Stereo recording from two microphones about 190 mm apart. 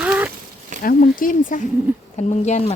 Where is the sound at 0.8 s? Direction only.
50° left (ahead or behind).